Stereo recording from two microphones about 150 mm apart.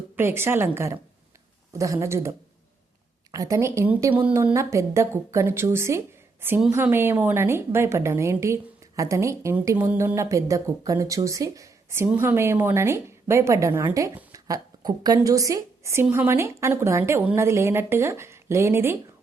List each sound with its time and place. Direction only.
0.2 s a woman's voice: 15° right (ahead or behind)
3.3 s a woman's voice: 20° right (ahead or behind)